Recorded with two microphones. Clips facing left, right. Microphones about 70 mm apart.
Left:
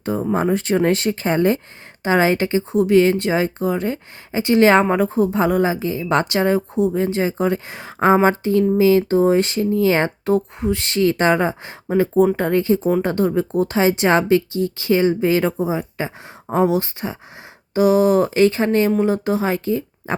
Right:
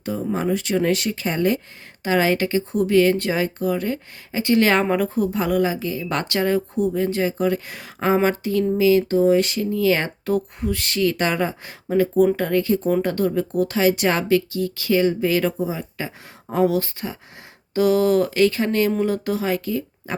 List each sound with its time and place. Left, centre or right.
0.0 s speech: left